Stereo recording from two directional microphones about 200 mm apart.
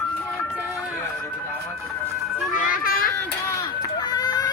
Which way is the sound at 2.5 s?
40° left (ahead or behind).